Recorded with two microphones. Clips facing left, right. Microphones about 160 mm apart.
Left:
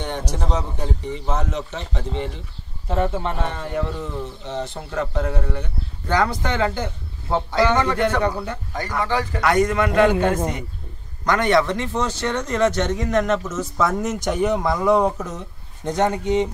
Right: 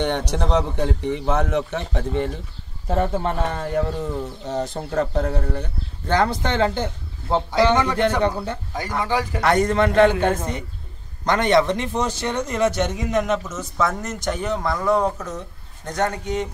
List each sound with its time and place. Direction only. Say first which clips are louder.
0.0 s a man's voice: right 5 dB; 65° right (ahead or behind)
2.9 s speech: right 1 dB; 40° right (ahead or behind); by 9.4 s 15° right (ahead or behind)
9.4 s speech: even; 30° right (ahead or behind); by 16.4 s 25° left (ahead or behind)